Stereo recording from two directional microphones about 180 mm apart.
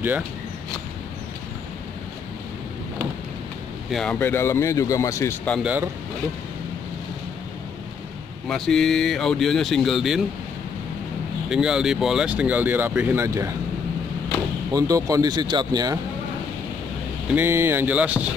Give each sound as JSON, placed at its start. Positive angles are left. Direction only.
{"t": 3.9, "sound": "speech", "side_deg": 5}
{"t": 5.5, "sound": "speech", "side_deg": -5}
{"t": 8.5, "sound": "speech", "side_deg": 0}
{"t": 11.4, "sound": "speech", "side_deg": -5}
{"t": 14.7, "sound": "speech", "side_deg": -20}
{"t": 17.3, "sound": "speech", "side_deg": -10}